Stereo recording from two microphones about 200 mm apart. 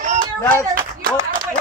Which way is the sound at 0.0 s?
40° right (ahead or behind).